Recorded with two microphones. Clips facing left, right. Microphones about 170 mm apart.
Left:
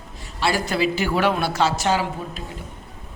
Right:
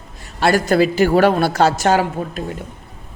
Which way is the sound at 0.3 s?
50° right (ahead or behind).